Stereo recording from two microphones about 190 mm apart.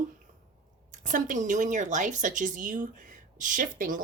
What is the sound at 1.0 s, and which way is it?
Speech, 45° right (ahead or behind).